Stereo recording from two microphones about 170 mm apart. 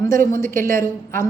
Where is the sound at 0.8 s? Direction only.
15° left (ahead or behind).